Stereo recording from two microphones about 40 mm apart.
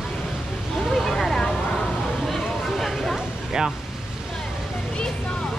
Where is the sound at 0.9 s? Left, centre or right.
Centre.